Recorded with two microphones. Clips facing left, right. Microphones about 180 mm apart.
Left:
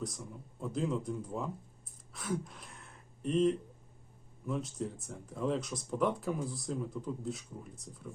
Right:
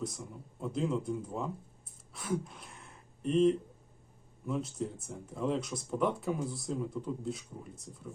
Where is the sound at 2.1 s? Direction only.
Centre (ahead or behind).